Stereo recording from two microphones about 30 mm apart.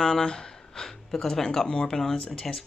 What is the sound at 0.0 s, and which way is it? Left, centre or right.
Gasp, left.